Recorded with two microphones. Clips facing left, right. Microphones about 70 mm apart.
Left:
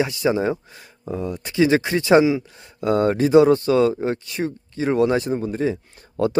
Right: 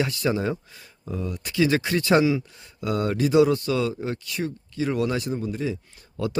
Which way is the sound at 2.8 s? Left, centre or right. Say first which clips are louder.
Left 6 dB; left.